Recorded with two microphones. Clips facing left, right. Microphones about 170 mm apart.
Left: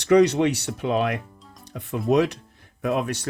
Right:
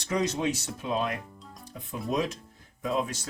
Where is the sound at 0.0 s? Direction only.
70° left (ahead or behind).